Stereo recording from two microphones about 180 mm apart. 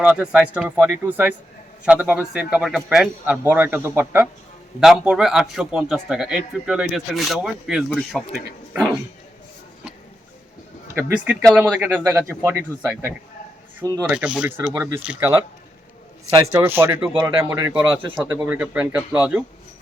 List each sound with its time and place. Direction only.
0.0 s a man's voice: 5° right (ahead or behind)
10.9 s a man's voice: 5° right (ahead or behind)
13.8 s speech: 20° right (ahead or behind)
14.1 s speech: 5° right (ahead or behind)